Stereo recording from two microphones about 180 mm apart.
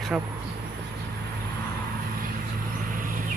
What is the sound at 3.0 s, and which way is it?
Vehicle, 50° right (ahead or behind).